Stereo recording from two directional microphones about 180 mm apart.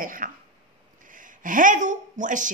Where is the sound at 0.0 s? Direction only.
50° right (ahead or behind).